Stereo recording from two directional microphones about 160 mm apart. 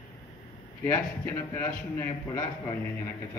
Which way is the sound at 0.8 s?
15° left (ahead or behind).